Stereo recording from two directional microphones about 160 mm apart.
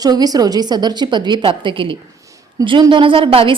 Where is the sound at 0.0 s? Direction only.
25° right (ahead or behind).